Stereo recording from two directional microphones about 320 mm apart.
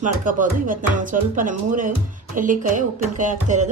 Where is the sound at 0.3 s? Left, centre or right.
Right.